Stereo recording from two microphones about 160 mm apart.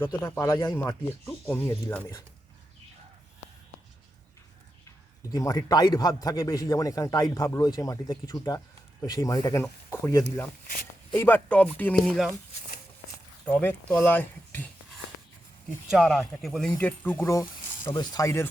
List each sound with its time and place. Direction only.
0.1 s speech: 20° left (ahead or behind)
5.3 s speech: 20° left (ahead or behind); by 12.3 s centre (ahead or behind)
13.4 s speech: 10° left (ahead or behind)
15.9 s speech: centre (ahead or behind); by 18.4 s 20° left (ahead or behind)